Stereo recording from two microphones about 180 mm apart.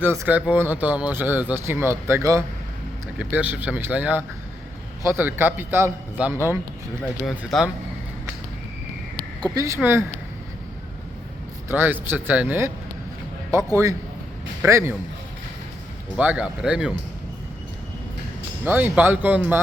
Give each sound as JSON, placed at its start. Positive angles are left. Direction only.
{"t": 0.0, "sound": "speech", "side_deg": -15}
{"t": 7.3, "sound": "speech", "side_deg": 0}
{"t": 9.6, "sound": "speech", "side_deg": -15}
{"t": 11.7, "sound": "speech", "side_deg": -10}
{"t": 16.1, "sound": "speech", "side_deg": -5}
{"t": 18.6, "sound": "speech", "side_deg": -10}